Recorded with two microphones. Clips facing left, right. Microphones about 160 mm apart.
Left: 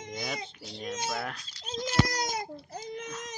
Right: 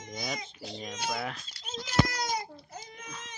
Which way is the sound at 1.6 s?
40° left (ahead or behind).